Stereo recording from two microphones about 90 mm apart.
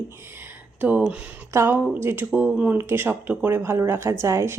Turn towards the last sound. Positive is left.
turn(degrees=-30)  # may be behind; listen again after turning